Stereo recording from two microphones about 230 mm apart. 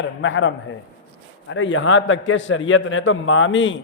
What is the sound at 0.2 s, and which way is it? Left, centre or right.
A man's voice, left.